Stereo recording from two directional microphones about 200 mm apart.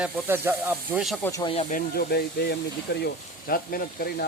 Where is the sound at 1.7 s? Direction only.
50° left (ahead or behind).